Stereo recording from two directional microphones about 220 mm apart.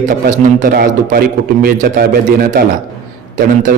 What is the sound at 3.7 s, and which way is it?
Speech, 40° right (ahead or behind).